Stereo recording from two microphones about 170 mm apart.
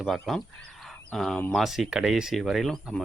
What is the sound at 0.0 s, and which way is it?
Speech, centre (ahead or behind).